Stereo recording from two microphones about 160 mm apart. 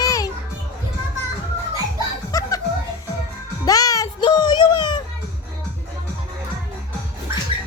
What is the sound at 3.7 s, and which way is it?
Music, 25° left (ahead or behind).